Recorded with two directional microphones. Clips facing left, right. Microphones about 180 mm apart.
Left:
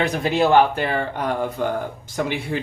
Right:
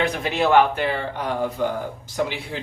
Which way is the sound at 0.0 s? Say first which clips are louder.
Left 2 dB; 40° left (ahead or behind).